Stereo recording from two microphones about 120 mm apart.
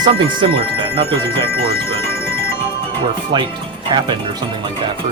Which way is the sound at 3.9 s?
40° right (ahead or behind).